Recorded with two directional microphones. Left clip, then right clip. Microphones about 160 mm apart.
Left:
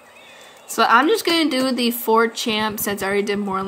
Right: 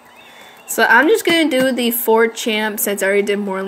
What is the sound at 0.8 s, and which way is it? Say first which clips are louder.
A woman's voice: right 4 dB; 20° left (ahead or behind).